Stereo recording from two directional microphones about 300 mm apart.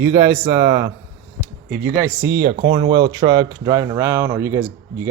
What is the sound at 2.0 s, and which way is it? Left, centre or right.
Speech, centre.